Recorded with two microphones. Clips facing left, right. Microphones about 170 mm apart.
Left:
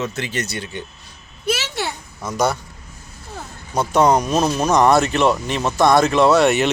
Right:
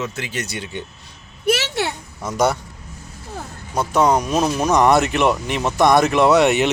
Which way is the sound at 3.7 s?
5° right (ahead or behind).